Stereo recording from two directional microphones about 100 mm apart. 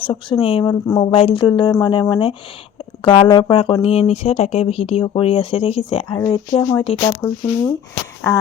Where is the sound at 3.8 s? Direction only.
85° left.